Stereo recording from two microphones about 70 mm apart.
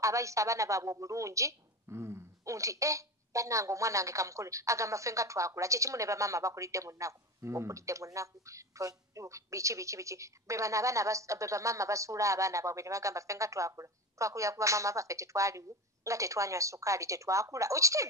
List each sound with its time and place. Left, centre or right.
0.0 s a woman's voice: right